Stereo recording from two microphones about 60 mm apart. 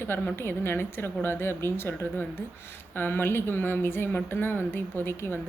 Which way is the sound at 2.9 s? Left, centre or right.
Left.